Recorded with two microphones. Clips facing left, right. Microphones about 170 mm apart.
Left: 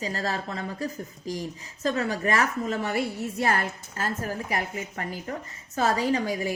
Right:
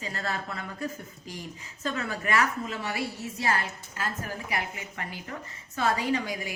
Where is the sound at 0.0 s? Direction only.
35° left (ahead or behind).